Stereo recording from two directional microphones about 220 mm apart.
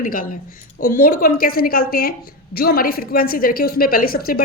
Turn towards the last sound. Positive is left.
turn(degrees=40)  # may be behind; listen again after turning